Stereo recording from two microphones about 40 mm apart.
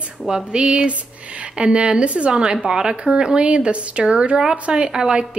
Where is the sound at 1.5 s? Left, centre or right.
Right.